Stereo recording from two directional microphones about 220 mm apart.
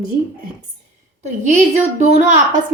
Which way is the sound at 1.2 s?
30° right (ahead or behind).